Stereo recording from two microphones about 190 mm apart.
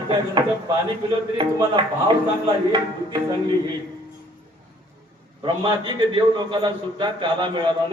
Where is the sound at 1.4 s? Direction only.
25° right (ahead or behind).